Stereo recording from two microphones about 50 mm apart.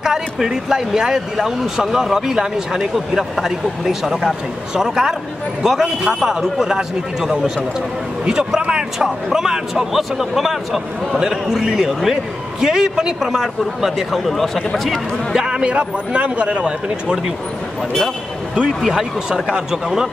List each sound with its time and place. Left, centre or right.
0.0 s speech: centre
15.3 s a man's voice: centre
18.7 s speech: centre